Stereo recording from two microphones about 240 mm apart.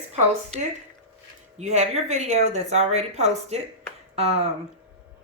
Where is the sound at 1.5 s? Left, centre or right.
Right.